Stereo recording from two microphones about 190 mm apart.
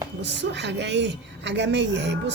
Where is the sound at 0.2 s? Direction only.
65° right (ahead or behind).